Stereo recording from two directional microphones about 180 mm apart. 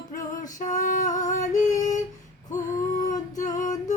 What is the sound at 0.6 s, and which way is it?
Female singing, 45° left (ahead or behind).